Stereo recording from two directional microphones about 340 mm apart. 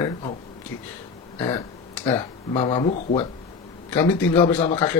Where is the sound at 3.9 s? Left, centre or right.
Centre.